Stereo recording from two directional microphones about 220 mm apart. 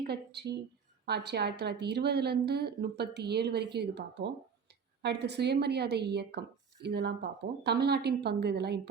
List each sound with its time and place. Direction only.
0.1 s a woman's voice: 50° right (ahead or behind)